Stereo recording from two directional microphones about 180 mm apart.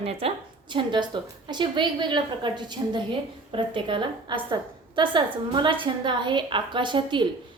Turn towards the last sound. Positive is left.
turn(degrees=-25)  # may be behind; listen again after turning